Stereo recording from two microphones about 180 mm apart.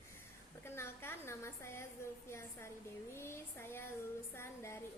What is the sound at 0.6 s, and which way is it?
A woman's voice, 15° left (ahead or behind).